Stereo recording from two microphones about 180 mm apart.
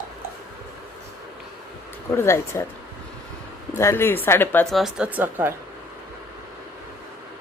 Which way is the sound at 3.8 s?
15° left (ahead or behind).